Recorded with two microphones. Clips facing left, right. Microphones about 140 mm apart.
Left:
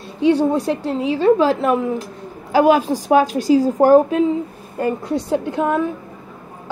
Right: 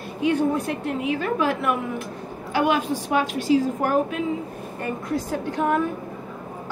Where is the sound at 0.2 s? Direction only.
35° left (ahead or behind).